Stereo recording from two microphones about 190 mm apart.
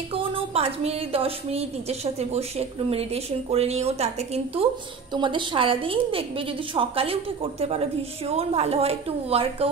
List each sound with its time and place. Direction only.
0.1 s a woman's voice: 30° right (ahead or behind)
8.3 s a woman's voice: 35° right (ahead or behind)